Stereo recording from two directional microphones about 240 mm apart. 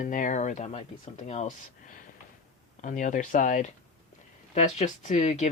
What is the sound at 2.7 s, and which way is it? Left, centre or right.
Speech, left.